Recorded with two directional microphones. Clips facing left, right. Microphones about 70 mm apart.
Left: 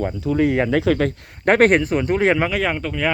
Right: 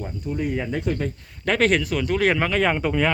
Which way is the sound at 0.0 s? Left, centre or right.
Left.